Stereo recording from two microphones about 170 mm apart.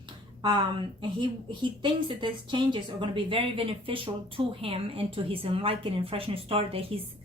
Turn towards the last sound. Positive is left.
turn(degrees=-35)  # may be behind; listen again after turning